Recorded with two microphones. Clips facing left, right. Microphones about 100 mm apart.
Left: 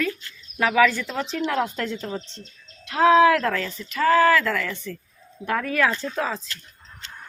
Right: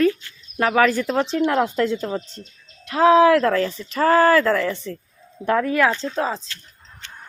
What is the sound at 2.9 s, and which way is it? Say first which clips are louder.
Speech: right 2 dB; 35° right (ahead or behind).